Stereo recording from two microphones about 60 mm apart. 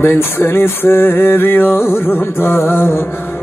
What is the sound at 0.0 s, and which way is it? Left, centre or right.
Music, left.